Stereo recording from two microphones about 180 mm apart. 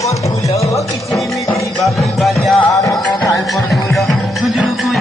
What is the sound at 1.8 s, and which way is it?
Music, centre (ahead or behind).